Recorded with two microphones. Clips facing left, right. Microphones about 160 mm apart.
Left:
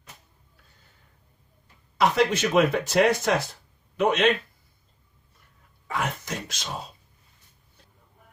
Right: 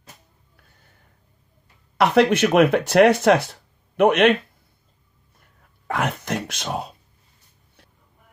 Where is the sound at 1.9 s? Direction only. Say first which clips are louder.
Right 5 dB; 65° right (ahead or behind).